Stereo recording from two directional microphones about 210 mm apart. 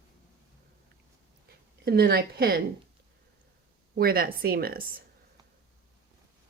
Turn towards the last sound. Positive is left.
turn(degrees=-45)  # may be behind; listen again after turning